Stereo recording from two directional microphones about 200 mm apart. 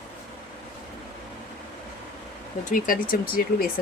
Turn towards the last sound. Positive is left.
turn(degrees=45)  # may be behind; listen again after turning